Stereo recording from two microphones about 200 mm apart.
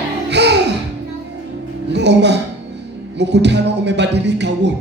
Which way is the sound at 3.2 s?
60° right (ahead or behind).